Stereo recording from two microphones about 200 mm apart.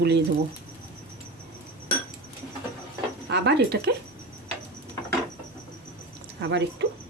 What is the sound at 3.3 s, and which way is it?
Speech, 60° right (ahead or behind).